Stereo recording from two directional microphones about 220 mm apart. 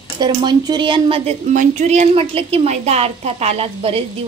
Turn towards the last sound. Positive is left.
turn(degrees=-25)  # may be behind; listen again after turning